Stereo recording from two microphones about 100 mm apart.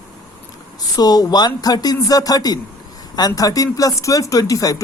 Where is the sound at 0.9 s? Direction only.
40° left (ahead or behind).